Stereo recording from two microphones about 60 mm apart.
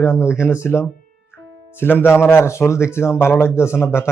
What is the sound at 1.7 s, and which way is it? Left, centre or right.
A man's voice, left.